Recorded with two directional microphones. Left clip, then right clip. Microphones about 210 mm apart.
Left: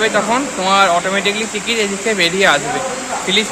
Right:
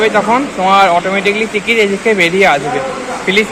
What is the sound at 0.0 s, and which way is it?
Speech, 5° left (ahead or behind).